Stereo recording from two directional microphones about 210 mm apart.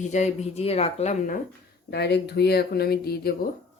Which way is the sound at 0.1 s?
30° left (ahead or behind).